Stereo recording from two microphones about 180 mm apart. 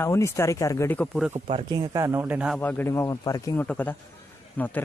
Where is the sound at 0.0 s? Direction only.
15° left (ahead or behind).